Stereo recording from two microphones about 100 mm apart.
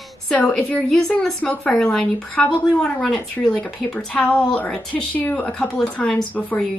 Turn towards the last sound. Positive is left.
turn(degrees=10)  # may be behind; listen again after turning